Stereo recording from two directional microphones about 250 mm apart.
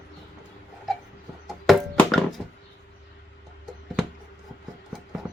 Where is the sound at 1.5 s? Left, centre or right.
Centre.